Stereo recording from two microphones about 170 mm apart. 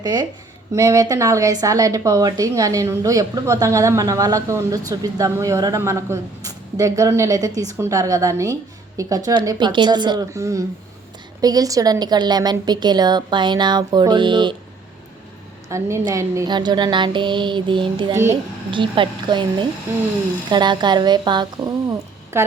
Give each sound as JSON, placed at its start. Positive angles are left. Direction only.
{"t": 0.0, "sound": "speech", "side_deg": -25}
{"t": 15.7, "sound": "speech", "side_deg": -15}
{"t": 18.1, "sound": "a child's voice", "side_deg": -15}
{"t": 18.7, "sound": "speech", "side_deg": -30}